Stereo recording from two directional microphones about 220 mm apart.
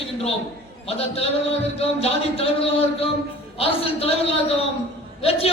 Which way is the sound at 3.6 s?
25° left (ahead or behind).